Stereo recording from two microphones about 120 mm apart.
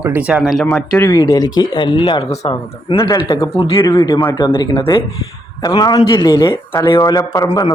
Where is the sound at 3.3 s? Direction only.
45° left (ahead or behind).